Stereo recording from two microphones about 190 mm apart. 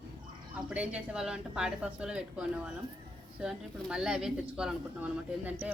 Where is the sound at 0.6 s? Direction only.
5° right (ahead or behind).